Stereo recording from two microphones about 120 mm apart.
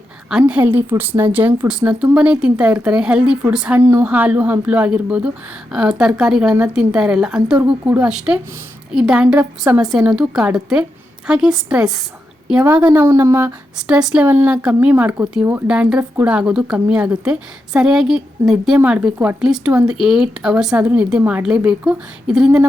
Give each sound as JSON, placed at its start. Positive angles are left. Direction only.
{"t": 0.3, "sound": "a woman's voice", "side_deg": -10}
{"t": 3.8, "sound": "speech", "side_deg": -25}
{"t": 4.0, "sound": "a woman's voice", "side_deg": -15}
{"t": 12.6, "sound": "speech", "side_deg": -20}
{"t": 13.7, "sound": "a woman's voice", "side_deg": -5}